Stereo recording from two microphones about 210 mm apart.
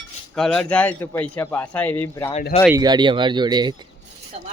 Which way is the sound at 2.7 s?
20° right (ahead or behind).